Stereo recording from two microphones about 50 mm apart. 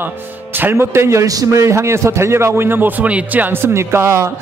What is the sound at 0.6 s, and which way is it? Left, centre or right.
Speech, right.